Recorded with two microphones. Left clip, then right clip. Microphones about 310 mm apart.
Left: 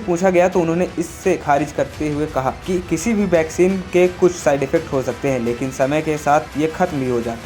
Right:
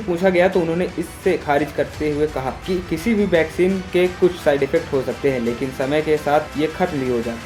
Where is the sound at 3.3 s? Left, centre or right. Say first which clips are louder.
Left 3 dB; centre.